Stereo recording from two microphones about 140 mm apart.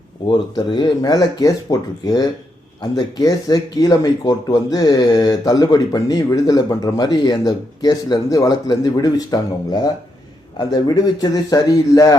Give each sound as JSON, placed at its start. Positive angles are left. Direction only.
{"t": 0.3, "sound": "speech", "side_deg": 30}
{"t": 10.6, "sound": "speech", "side_deg": 30}